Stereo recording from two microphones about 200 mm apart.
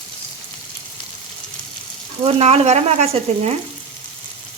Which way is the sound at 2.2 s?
30° right (ahead or behind).